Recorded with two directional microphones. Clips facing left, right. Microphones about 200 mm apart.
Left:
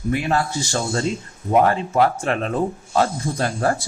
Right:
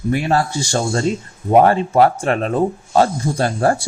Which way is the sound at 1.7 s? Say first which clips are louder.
Right 5 dB; 35° right (ahead or behind).